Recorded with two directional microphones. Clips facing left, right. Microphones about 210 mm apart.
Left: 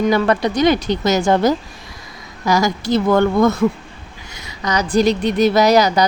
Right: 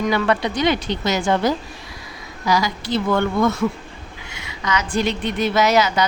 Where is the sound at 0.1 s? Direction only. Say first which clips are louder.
Left 4 dB; 40° left (ahead or behind).